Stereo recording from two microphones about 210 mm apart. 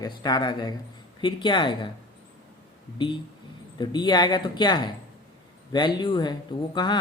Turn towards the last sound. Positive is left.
turn(degrees=20)  # may be behind; listen again after turning